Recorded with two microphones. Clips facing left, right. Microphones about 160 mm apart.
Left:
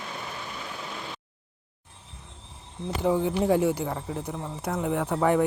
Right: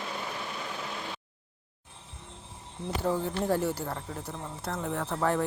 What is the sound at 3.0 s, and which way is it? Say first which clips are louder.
Speech: left 6 dB; 15° left (ahead or behind).